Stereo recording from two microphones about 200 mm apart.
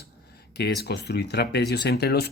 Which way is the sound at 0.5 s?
55° left (ahead or behind).